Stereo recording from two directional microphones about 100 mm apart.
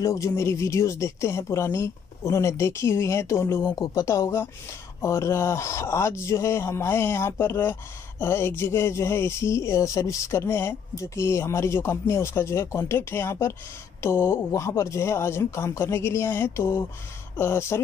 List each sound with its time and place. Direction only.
0.0 s speech: 30° left (ahead or behind)